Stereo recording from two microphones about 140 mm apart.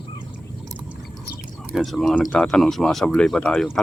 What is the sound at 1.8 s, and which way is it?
Speech, centre (ahead or behind).